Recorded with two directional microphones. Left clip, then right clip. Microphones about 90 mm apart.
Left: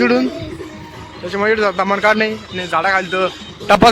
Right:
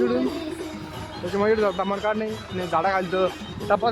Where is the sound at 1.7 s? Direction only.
25° left (ahead or behind).